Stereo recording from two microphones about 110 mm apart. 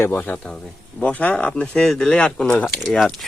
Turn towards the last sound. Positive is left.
turn(degrees=5)  # may be behind; listen again after turning